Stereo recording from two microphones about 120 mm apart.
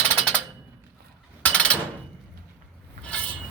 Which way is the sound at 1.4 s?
10° left (ahead or behind).